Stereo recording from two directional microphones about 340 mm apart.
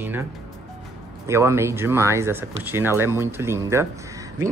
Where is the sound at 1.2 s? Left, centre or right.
Centre.